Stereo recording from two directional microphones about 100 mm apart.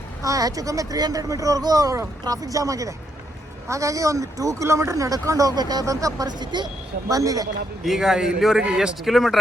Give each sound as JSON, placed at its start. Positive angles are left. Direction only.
{"t": 0.2, "sound": "speech", "side_deg": -35}
{"t": 7.1, "sound": "speech", "side_deg": -35}
{"t": 7.9, "sound": "a man's voice", "side_deg": -5}